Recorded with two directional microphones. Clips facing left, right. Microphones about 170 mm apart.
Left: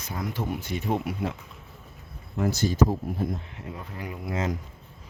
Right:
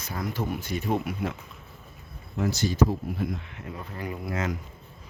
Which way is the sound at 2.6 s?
45° left (ahead or behind).